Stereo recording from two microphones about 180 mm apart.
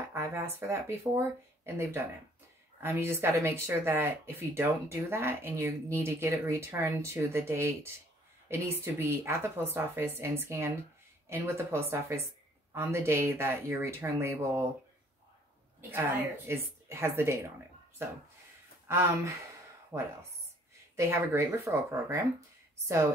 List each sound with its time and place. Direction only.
0.1 s speech: 15° right (ahead or behind)
2.8 s speech: 15° right (ahead or behind)
15.9 s speech: 15° right (ahead or behind)
18.9 s speech: 15° right (ahead or behind)